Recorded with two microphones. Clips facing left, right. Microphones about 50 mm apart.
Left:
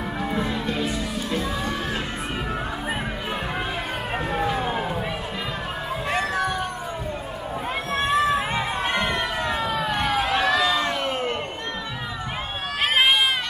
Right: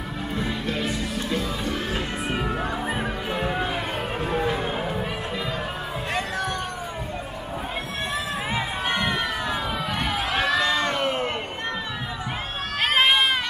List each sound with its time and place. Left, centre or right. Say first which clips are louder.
0.4 s music: right 1 dB; centre
4.2 s music: even; centre
6.1 s a sound: left 4 dB; centre
8.0 s run: left 9 dB; left
9.0 s crowd: left 1 dB; centre
12.8 s run: even; centre